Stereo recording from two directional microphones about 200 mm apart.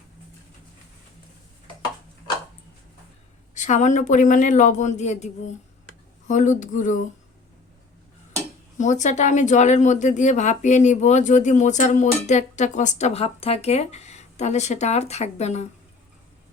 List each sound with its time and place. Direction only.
3.5 s speech: 35° left (ahead or behind)
8.8 s speech: 35° left (ahead or behind)